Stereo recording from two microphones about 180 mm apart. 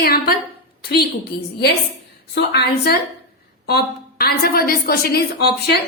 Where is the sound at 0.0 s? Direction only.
55° left (ahead or behind).